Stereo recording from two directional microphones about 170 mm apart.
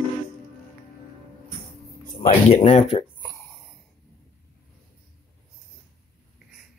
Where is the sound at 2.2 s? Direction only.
45° left (ahead or behind).